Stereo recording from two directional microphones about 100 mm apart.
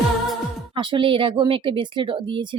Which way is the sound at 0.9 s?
60° right (ahead or behind).